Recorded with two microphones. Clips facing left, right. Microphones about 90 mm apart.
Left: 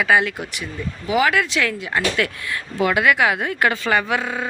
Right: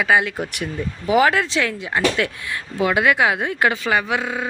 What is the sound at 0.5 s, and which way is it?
Speech, 55° right (ahead or behind).